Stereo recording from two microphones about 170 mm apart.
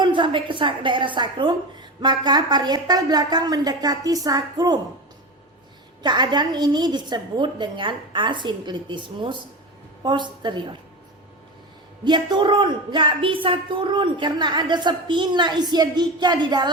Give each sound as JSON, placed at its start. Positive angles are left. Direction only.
{"t": 0.0, "sound": "speech", "side_deg": -30}
{"t": 6.0, "sound": "speech", "side_deg": -25}
{"t": 12.0, "sound": "speech", "side_deg": -25}